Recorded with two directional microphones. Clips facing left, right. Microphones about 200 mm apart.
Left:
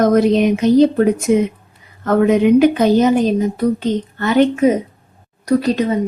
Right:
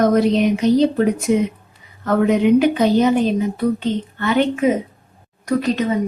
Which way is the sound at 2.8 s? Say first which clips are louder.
Left 2 dB; 45° left (ahead or behind).